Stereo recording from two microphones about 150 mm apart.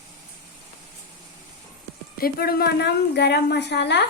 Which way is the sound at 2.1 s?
80° left.